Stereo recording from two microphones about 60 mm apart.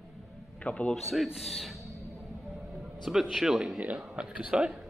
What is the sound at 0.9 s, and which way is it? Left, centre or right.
Speech, centre.